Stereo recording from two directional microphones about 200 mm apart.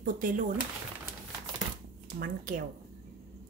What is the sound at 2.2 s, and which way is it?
Speech, 45° right (ahead or behind).